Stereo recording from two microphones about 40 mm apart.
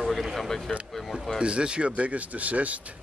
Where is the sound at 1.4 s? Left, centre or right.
Right.